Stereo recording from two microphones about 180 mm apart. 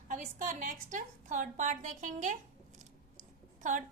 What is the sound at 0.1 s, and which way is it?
A woman's voice, 45° right (ahead or behind).